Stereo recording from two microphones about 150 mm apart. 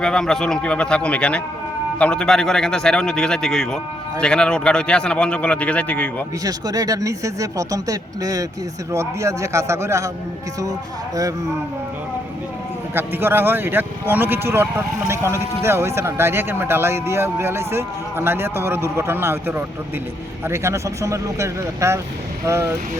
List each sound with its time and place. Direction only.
0.0 s a man's voice: 5° left (ahead or behind)
6.4 s a man's voice: 25° right (ahead or behind)
12.9 s a man's voice: 15° right (ahead or behind)